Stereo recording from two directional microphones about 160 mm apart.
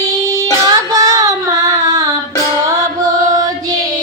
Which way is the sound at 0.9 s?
20° right (ahead or behind).